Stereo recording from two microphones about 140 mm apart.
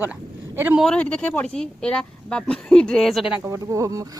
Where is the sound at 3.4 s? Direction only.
20° right (ahead or behind).